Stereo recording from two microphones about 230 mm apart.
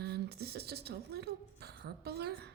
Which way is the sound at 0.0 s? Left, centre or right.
Right.